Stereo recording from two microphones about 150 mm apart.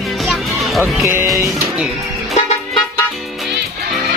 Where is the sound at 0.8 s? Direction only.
15° right (ahead or behind).